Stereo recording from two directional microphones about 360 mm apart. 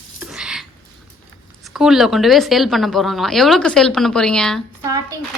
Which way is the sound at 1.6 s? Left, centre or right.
Centre.